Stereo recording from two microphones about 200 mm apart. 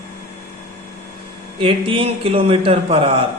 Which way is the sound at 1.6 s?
25° right (ahead or behind).